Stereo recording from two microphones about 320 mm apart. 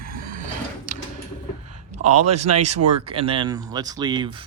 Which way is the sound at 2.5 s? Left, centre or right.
Right.